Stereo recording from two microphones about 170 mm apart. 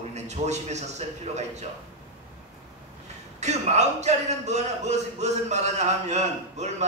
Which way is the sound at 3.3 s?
40° right (ahead or behind).